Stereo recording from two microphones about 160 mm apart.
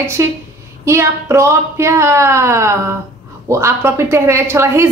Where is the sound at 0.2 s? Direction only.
20° right (ahead or behind).